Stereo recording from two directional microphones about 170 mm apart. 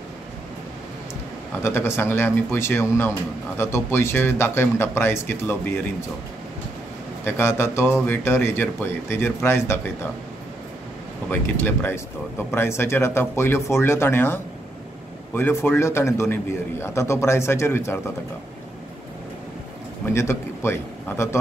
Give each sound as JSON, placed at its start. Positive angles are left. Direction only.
{"t": 1.6, "sound": "speech", "side_deg": 15}
{"t": 7.2, "sound": "speech", "side_deg": 15}
{"t": 11.2, "sound": "speech", "side_deg": 10}
{"t": 20.1, "sound": "a man's voice", "side_deg": 15}